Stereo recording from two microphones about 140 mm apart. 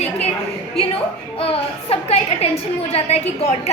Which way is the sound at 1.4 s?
45° left (ahead or behind).